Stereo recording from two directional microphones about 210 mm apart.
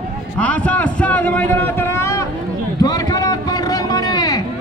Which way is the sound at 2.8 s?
20° left (ahead or behind).